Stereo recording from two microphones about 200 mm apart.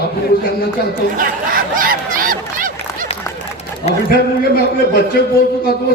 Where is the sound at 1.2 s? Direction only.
45° right (ahead or behind).